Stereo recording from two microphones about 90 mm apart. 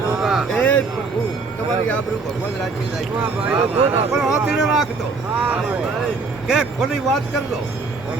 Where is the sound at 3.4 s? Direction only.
20° right (ahead or behind).